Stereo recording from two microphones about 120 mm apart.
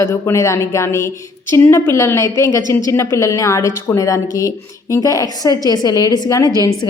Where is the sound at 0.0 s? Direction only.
25° left (ahead or behind).